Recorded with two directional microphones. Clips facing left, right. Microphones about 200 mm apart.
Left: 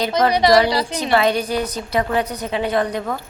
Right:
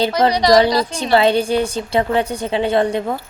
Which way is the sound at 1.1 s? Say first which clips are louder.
Right 4 dB; 30° right (ahead or behind).